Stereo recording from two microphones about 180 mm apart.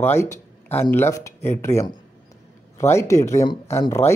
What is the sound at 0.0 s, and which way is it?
Speech, 15° left (ahead or behind).